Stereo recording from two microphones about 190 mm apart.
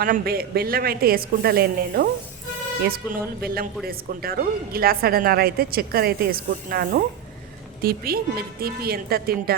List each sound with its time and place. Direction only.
0.0 s a woman's voice: 50° right (ahead or behind)
3.4 s a woman's voice: 50° right (ahead or behind)